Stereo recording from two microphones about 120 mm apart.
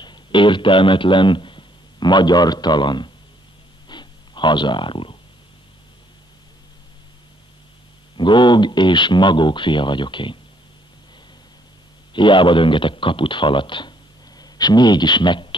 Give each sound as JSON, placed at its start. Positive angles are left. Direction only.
{"t": 0.0, "sound": "a man's voice", "side_deg": 40}
{"t": 3.9, "sound": "snort", "side_deg": 40}
{"t": 8.2, "sound": "speech", "side_deg": 40}
{"t": 12.1, "sound": "a man's voice", "side_deg": 40}